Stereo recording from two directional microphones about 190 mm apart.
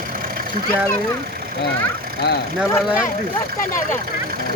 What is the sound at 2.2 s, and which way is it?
Speech, 60° left (ahead or behind).